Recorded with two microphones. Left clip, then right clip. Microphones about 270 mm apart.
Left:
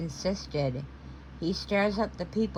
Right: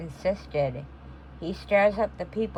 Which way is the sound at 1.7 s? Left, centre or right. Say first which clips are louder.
Right 7 dB; centre.